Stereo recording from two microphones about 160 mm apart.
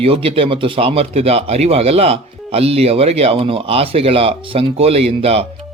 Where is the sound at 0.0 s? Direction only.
35° right (ahead or behind).